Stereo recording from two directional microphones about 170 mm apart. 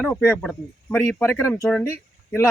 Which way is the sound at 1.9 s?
15° left (ahead or behind).